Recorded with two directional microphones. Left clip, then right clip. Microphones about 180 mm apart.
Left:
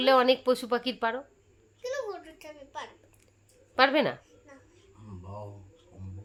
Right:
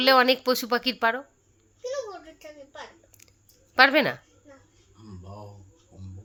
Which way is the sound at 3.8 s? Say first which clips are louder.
Right 5 dB; 5° right (ahead or behind).